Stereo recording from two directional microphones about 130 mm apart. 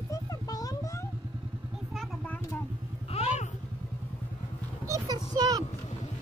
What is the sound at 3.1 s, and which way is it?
Vehicle, 55° left (ahead or behind).